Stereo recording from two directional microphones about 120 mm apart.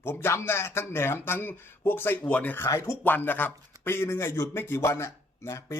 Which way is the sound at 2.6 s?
25° left (ahead or behind).